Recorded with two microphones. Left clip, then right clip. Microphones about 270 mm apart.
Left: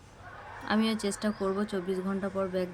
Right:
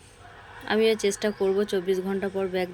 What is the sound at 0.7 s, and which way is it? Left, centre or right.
Speech, centre.